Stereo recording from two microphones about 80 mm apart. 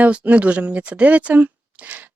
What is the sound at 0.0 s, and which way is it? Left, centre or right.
Speech, centre.